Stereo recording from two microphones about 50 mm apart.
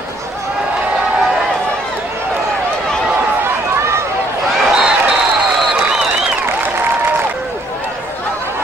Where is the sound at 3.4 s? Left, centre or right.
Right.